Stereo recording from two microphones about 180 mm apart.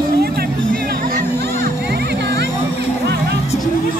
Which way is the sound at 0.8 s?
55° right (ahead or behind).